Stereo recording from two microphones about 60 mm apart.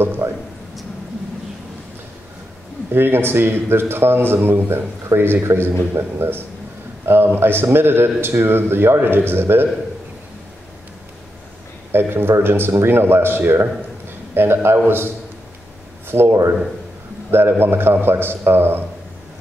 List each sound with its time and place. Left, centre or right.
0.2 s speech: right
2.9 s a man's voice: right
11.9 s a man's voice: right
16.1 s a man's voice: right